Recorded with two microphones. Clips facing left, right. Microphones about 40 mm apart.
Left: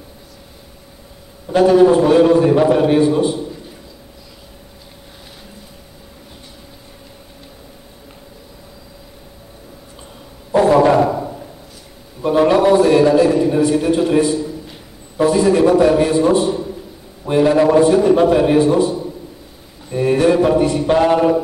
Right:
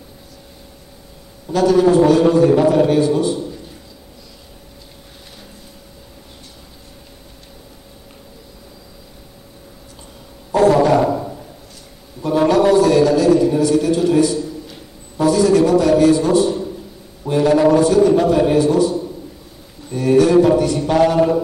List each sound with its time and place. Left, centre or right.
1.5 s a man's voice: left
10.5 s a sound: centre
12.2 s a man's voice: left